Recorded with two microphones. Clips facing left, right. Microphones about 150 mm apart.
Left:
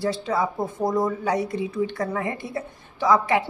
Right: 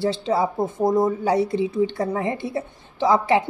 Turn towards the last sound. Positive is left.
turn(degrees=-25)  # may be behind; listen again after turning